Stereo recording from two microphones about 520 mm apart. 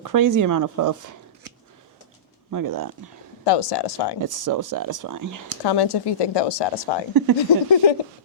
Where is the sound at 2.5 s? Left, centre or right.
Right.